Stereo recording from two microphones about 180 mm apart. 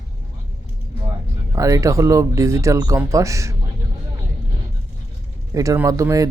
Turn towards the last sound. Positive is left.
turn(degrees=-20)  # may be behind; listen again after turning